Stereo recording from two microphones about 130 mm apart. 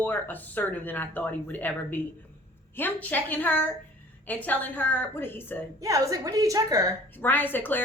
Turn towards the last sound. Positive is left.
turn(degrees=15)  # may be behind; listen again after turning